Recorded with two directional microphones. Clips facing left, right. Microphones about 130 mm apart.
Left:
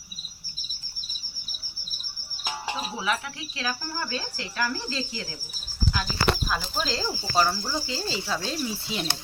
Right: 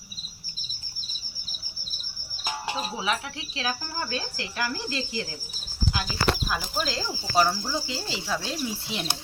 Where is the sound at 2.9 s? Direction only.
20° right (ahead or behind).